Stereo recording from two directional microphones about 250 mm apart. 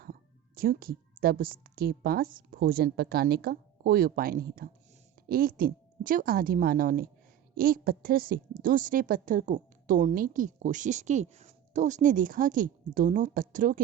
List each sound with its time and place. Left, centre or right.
0.0 s music: right
1.2 s a woman's voice: right